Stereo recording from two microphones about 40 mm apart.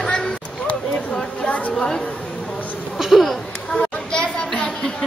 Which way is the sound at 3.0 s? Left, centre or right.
Centre.